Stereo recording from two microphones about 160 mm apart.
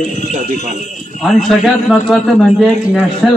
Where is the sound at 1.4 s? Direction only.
Centre (ahead or behind).